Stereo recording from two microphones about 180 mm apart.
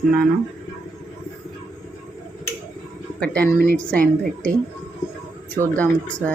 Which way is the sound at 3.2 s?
5° left (ahead or behind).